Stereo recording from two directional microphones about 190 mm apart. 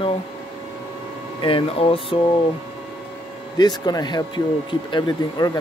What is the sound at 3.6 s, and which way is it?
Speech, 20° left (ahead or behind).